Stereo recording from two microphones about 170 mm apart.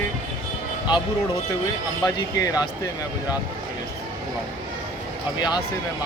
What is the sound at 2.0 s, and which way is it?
Speech, 20° left (ahead or behind).